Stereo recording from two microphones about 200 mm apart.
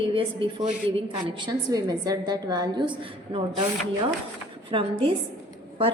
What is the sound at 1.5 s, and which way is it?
A woman's voice, 20° right (ahead or behind).